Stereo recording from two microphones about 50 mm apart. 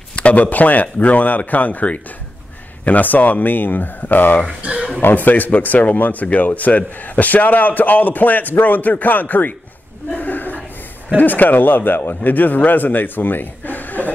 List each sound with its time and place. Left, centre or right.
0.1 s a man's voice: left
4.6 s a sound: right
5.1 s a man's voice: left
10.1 s chuckle: left
11.1 s a man's voice: left